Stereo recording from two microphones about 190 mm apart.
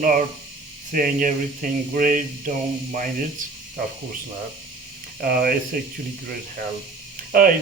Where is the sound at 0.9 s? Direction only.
45° right (ahead or behind).